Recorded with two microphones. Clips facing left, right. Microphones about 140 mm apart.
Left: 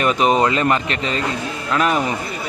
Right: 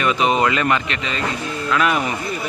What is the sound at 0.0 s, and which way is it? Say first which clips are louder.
Speech: left 2 dB; 40° left (ahead or behind).